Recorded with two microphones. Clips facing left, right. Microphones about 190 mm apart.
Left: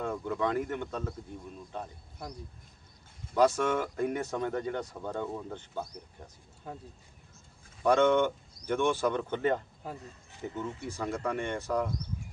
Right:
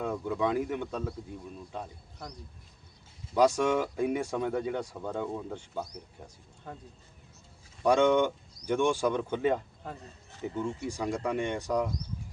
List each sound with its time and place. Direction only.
0.0 s speech: 10° right (ahead or behind)
3.3 s speech: 15° right (ahead or behind)
6.7 s speech: 5° left (ahead or behind)
7.9 s speech: 15° right (ahead or behind)
9.8 s speech: 5° left (ahead or behind)
10.4 s speech: 10° right (ahead or behind)